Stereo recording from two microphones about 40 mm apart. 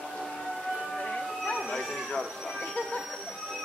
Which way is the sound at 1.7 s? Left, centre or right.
Centre.